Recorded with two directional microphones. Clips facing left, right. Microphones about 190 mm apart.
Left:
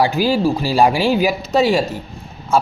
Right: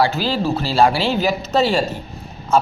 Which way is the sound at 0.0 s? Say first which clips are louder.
Left 3 dB; 15° left (ahead or behind).